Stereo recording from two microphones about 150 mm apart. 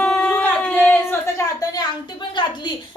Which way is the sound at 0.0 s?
5° left (ahead or behind).